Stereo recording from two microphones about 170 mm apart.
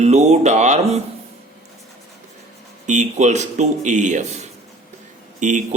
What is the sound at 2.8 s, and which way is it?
A man's voice, 45° right (ahead or behind).